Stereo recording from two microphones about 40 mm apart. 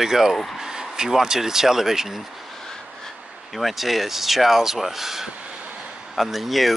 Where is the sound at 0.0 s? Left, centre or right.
Centre.